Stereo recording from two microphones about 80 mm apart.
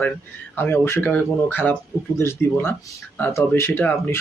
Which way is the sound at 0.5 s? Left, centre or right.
Left.